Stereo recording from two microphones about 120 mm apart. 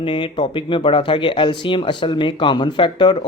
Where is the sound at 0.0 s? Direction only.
40° left (ahead or behind).